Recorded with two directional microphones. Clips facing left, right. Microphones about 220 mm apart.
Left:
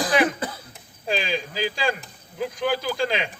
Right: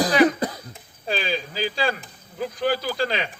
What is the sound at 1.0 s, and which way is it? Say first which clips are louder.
Speech: even; 15° left (ahead or behind).